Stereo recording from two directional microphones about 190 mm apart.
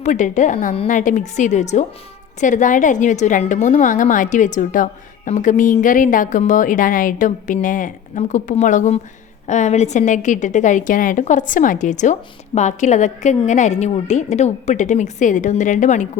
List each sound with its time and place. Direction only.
0.0 s a woman's voice: 40° left (ahead or behind)